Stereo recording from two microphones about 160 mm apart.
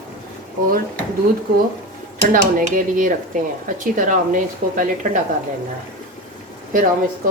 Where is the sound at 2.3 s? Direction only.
55° right (ahead or behind).